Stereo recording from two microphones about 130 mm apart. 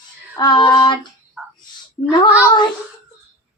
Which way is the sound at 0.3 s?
35° left (ahead or behind).